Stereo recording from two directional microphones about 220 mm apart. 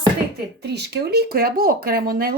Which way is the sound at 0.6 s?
50° right (ahead or behind).